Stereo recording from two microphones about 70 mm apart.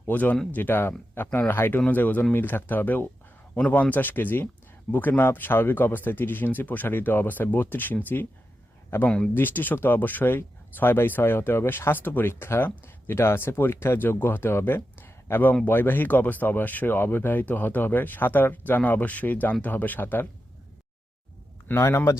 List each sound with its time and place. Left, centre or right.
0.1 s speech: left
9.0 s speech: centre
9.3 s speech: left
21.8 s speech: left